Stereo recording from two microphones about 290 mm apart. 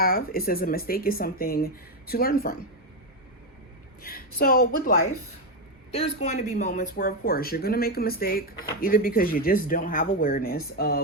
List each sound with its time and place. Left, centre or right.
0.0 s speech: left
4.0 s a woman's voice: left